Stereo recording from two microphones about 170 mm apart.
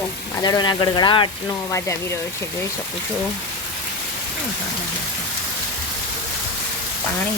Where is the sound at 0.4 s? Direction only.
25° left (ahead or behind).